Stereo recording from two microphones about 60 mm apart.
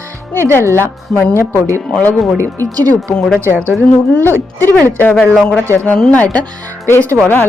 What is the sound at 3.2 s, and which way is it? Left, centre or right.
Speech, centre.